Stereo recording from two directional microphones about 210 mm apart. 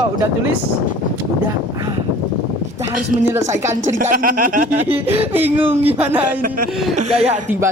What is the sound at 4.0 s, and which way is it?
Speech, 40° right (ahead or behind).